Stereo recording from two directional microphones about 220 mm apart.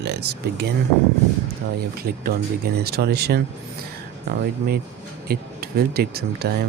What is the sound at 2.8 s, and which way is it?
Speech, 45° right (ahead or behind).